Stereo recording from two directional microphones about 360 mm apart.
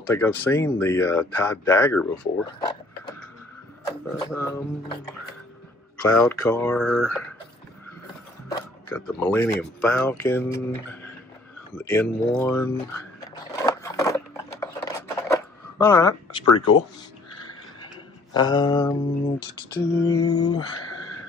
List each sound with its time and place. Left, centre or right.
0.1 s speech: centre
3.8 s speech: centre
6.0 s speech: centre
8.5 s speech: centre
11.9 s speech: centre
13.8 s scissors: centre
16.4 s speech: left
18.3 s speech: centre